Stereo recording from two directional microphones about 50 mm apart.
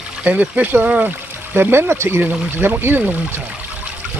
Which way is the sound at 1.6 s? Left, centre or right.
Right.